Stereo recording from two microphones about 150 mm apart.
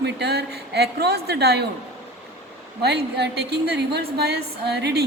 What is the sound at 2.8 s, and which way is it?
A woman's voice, 90° right.